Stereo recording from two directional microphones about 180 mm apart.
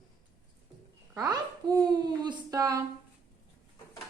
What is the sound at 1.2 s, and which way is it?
A child's voice, 20° right (ahead or behind).